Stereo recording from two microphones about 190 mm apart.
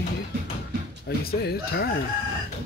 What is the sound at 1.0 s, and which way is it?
Speech, 60° left (ahead or behind).